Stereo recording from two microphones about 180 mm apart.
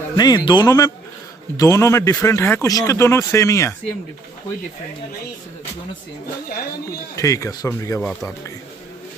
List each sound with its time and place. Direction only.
0.2 s speech: 25° left (ahead or behind)
7.2 s speech: 20° left (ahead or behind)